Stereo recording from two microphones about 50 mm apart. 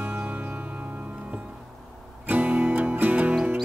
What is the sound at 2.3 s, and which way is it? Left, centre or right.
Music, right.